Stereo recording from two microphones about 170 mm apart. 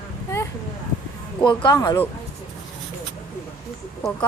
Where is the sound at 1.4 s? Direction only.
25° left (ahead or behind).